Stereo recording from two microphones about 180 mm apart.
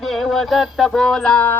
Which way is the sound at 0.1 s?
Centre (ahead or behind).